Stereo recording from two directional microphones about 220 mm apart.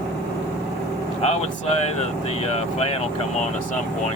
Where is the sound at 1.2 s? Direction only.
30° left (ahead or behind).